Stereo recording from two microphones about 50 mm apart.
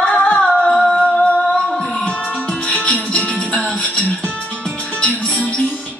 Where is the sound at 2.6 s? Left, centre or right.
Centre.